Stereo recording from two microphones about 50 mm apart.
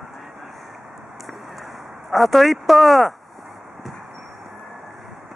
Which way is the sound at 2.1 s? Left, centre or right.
Centre.